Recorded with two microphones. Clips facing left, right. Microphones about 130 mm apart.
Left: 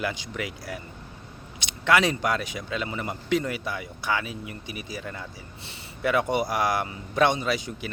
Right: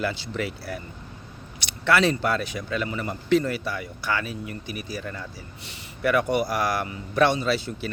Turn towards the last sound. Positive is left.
turn(degrees=15)  # may be behind; listen again after turning